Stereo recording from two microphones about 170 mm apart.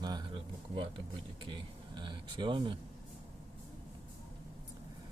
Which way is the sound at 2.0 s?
30° right (ahead or behind).